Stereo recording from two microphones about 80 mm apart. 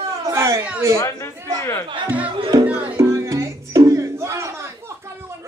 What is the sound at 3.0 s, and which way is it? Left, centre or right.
Music, right.